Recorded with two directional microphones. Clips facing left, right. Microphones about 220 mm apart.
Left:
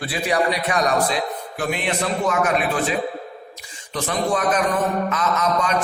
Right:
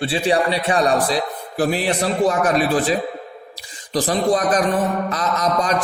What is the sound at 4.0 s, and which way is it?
A man's voice, 35° right (ahead or behind).